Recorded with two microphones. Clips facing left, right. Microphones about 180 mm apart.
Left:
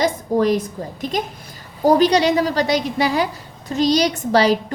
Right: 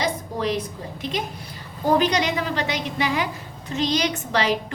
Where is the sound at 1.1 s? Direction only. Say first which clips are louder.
Left 6 dB; 40° left (ahead or behind).